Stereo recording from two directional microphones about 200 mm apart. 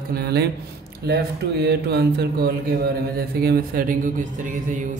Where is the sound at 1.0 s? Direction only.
55° right (ahead or behind).